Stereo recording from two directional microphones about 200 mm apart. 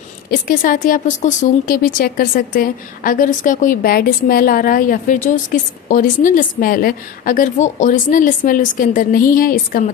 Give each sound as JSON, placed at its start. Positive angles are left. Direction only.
{"t": 0.3, "sound": "speech", "side_deg": 45}